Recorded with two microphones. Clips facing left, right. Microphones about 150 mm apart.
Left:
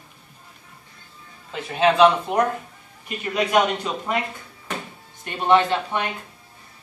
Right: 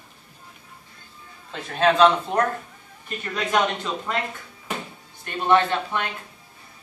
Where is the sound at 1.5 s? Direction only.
5° left (ahead or behind).